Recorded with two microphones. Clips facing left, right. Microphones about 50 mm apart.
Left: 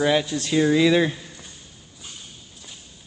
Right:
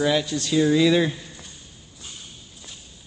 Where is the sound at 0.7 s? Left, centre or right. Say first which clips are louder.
Left 1 dB; centre.